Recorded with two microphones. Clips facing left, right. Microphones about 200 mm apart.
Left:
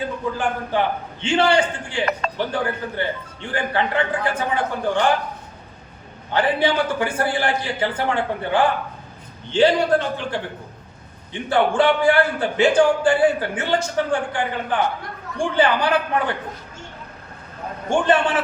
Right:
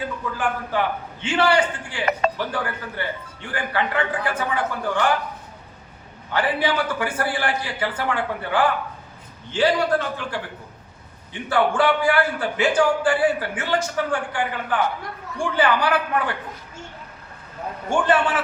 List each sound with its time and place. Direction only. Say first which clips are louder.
0.0 s speech: left 2 dB; 25° left (ahead or behind)
6.3 s speech: left 3 dB; 25° left (ahead or behind)
17.8 s speech: left 2 dB; 25° left (ahead or behind)